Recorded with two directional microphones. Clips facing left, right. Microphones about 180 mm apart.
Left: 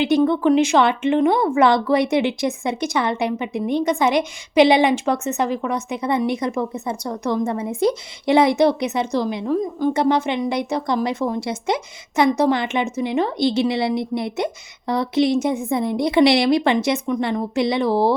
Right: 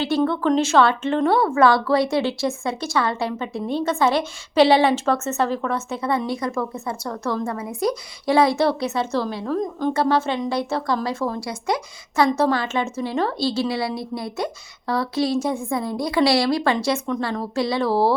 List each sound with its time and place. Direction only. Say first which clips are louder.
0.0 s a woman's voice: left 4 dB; 15° left (ahead or behind)